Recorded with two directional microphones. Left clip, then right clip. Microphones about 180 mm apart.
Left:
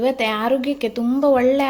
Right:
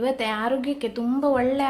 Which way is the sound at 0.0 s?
25° left (ahead or behind).